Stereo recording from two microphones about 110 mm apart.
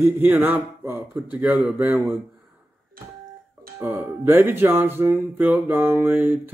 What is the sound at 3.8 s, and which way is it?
Speech, 20° right (ahead or behind).